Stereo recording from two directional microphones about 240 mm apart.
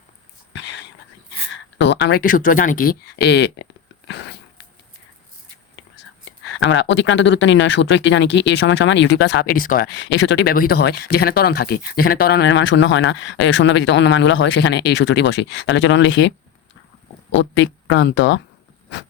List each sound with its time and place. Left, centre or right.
1.8 s speech: left
6.6 s speech: left
17.4 s speech: left